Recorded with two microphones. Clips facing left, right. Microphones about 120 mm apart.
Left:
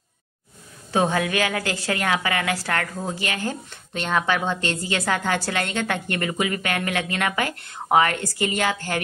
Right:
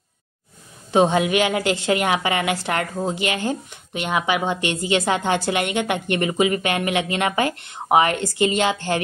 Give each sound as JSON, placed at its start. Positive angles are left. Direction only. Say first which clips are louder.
{"t": 0.9, "sound": "a woman's voice", "louder": "right 4 dB", "side_deg": -20}